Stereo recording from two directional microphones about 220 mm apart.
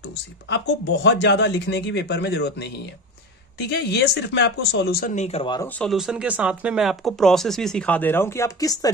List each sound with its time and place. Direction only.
0.5 s speech: 55° left (ahead or behind)
3.5 s speech: 50° left (ahead or behind); by 5.7 s 20° left (ahead or behind)
5.8 s speech: centre (ahead or behind); by 8.9 s 15° left (ahead or behind)